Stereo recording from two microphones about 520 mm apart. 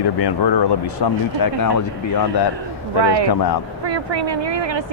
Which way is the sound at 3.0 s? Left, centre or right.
Right.